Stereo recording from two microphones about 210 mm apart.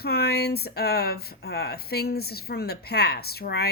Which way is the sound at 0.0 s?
50° left (ahead or behind).